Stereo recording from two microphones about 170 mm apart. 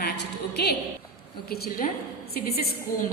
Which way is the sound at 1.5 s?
65° left (ahead or behind).